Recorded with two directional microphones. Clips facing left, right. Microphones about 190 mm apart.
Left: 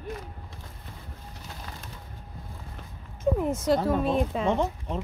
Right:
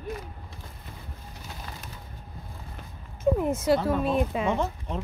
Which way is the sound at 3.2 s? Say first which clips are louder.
Right 1 dB; 5° right (ahead or behind).